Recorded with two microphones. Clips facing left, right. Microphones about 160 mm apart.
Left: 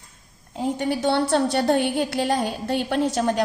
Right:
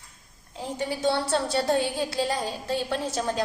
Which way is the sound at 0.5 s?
60° left (ahead or behind).